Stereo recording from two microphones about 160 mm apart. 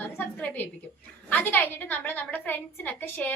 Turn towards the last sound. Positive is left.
turn(degrees=10)  # may be behind; listen again after turning